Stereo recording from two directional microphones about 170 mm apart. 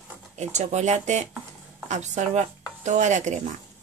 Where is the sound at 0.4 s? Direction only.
45° right (ahead or behind).